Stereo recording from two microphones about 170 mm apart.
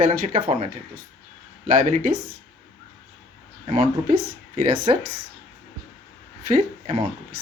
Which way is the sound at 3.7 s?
50° right (ahead or behind).